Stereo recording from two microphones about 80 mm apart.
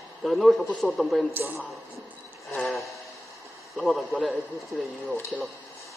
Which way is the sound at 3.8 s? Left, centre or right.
Centre.